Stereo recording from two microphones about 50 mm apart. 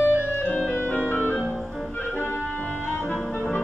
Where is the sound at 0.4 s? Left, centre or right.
Left.